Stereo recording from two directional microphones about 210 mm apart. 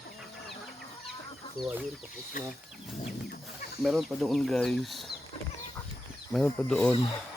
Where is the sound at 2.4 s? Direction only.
40° left (ahead or behind).